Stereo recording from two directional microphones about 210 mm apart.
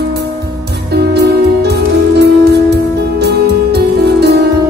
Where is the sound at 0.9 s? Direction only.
50° right (ahead or behind).